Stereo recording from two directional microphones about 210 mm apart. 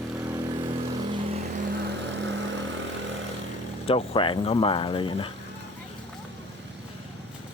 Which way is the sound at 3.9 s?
25° left (ahead or behind).